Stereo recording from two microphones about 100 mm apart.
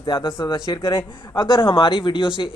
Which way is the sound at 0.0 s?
60° left (ahead or behind).